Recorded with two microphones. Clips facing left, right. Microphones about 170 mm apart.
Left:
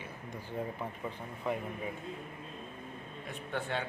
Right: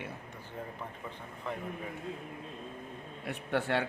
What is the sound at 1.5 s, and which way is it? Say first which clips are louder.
Speech: left 4 dB; 15° left (ahead or behind).